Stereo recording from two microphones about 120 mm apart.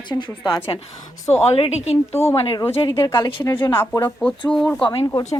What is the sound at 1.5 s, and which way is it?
Speech, 55° left (ahead or behind).